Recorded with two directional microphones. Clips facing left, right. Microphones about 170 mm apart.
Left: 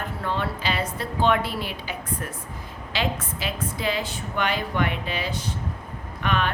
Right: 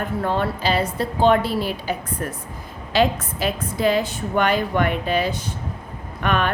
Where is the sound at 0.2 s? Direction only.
45° right (ahead or behind).